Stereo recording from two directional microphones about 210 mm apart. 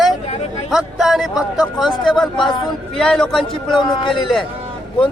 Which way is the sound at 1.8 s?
20° left (ahead or behind).